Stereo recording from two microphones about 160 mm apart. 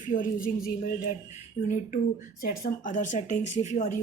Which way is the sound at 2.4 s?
65° left (ahead or behind).